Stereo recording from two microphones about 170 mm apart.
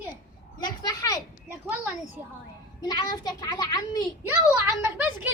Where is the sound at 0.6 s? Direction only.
25° left (ahead or behind).